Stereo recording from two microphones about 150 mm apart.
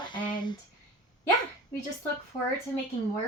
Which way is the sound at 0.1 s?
30° left (ahead or behind).